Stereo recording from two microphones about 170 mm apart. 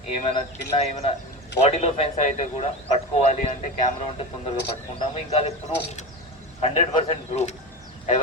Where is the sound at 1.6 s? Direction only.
40° left (ahead or behind).